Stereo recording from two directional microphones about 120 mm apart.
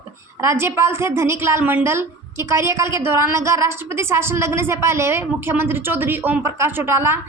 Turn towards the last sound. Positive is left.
turn(degrees=-20)  # may be behind; listen again after turning